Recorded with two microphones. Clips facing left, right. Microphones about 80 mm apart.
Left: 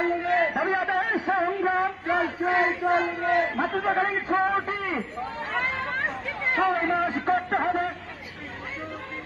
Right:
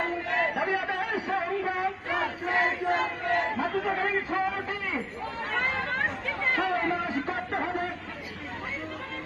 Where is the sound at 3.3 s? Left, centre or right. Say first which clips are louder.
Left 1 dB; left.